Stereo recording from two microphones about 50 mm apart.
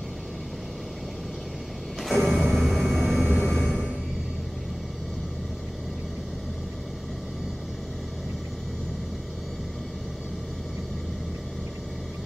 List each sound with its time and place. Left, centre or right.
2.0 s music: centre
3.3 s vehicle: centre